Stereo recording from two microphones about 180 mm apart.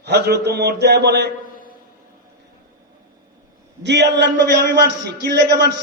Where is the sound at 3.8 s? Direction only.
70° right (ahead or behind).